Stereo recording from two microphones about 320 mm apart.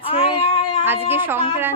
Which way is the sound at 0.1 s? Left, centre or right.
Centre.